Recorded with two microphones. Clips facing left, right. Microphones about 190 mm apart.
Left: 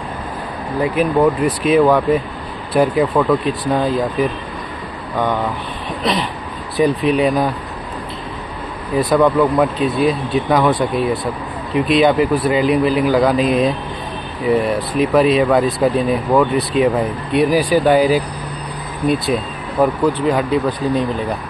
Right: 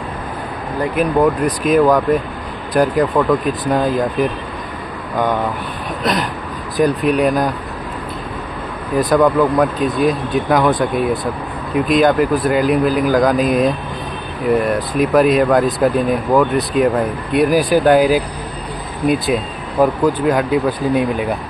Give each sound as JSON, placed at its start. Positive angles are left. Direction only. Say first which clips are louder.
{"t": 0.9, "sound": "speech", "louder": "even", "side_deg": 0}
{"t": 6.8, "sound": "speech", "louder": "even", "side_deg": 0}
{"t": 8.9, "sound": "speech", "louder": "even", "side_deg": 0}